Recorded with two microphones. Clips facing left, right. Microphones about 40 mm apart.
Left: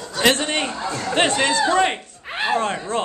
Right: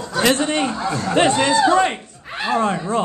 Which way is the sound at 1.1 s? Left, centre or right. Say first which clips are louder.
Right 3 dB; left.